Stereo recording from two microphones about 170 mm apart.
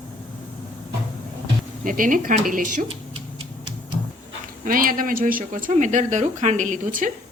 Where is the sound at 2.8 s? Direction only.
30° right (ahead or behind).